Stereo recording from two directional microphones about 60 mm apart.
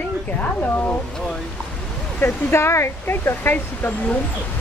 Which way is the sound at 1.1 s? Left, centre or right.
Centre.